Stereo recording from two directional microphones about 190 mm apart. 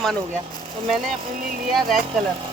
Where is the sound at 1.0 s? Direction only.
45° right (ahead or behind).